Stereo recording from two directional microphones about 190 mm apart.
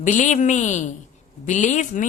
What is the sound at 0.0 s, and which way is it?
Speech, 40° left (ahead or behind).